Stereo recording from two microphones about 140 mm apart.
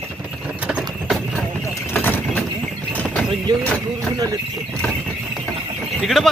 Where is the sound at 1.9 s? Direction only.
15° left (ahead or behind).